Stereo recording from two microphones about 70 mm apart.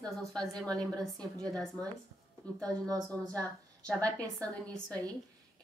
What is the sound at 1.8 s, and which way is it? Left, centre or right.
A woman's voice, centre.